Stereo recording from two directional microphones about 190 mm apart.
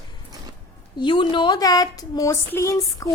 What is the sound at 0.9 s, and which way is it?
A woman's voice, 25° left (ahead or behind).